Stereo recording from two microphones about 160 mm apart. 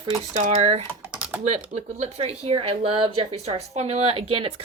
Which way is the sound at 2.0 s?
40° right (ahead or behind).